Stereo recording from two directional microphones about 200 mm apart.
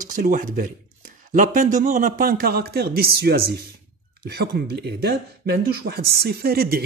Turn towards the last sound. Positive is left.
turn(degrees=-50)  # may be behind; listen again after turning